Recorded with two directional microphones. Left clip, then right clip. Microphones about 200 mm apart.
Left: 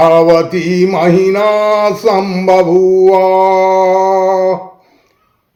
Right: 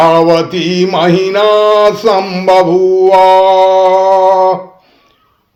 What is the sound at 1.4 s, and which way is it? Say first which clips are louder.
Mantra: right 3 dB; 30° right (ahead or behind).